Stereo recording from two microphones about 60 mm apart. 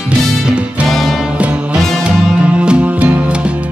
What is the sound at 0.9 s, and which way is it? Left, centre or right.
Music, centre.